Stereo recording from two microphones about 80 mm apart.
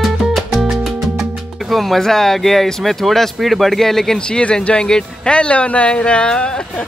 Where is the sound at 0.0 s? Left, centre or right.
Centre.